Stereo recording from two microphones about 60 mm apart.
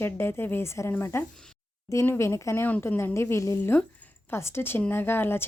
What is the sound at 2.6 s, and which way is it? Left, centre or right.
A woman's voice, left.